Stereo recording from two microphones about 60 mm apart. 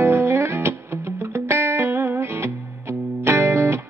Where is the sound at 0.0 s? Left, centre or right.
Right.